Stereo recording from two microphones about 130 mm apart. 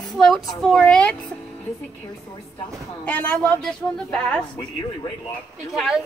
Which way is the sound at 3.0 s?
10° left (ahead or behind).